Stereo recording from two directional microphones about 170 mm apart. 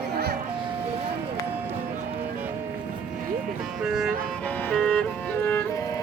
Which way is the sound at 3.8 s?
5° right (ahead or behind).